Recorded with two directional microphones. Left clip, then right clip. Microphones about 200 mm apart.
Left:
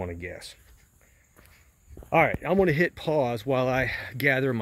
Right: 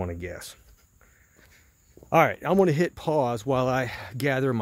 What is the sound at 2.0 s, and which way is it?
Speech, 25° right (ahead or behind).